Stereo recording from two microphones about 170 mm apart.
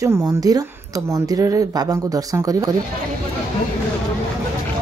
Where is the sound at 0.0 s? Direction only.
20° right (ahead or behind).